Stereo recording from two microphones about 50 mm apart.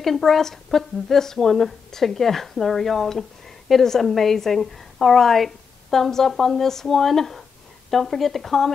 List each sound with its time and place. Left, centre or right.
0.0 s a woman's voice: centre